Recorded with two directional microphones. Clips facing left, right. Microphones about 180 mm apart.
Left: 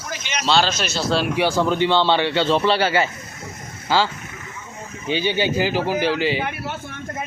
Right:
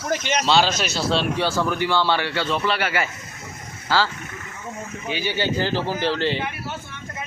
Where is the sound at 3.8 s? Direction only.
15° left (ahead or behind).